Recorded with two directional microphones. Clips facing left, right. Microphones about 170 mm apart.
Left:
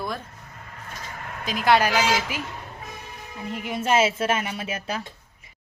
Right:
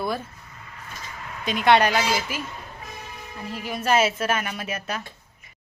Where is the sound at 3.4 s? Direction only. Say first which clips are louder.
Even; 20° left (ahead or behind).